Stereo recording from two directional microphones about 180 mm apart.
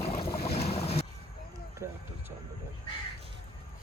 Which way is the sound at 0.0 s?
35° left (ahead or behind).